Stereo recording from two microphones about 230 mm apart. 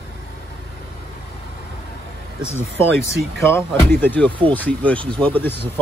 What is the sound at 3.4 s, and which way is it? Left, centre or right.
Speech, centre.